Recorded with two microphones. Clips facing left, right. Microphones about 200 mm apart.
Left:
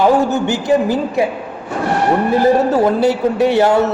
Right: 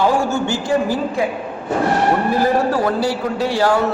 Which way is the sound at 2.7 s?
20° left (ahead or behind).